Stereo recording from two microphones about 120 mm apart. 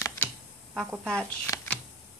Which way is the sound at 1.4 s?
25° left (ahead or behind).